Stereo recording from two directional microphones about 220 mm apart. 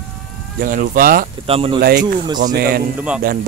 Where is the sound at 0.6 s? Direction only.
40° right (ahead or behind).